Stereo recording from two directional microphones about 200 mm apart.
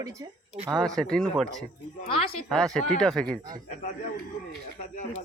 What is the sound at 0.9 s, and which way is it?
Speech, 5° left (ahead or behind).